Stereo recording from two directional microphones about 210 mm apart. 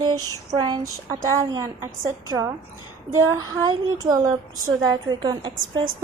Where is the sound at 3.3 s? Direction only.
15° right (ahead or behind).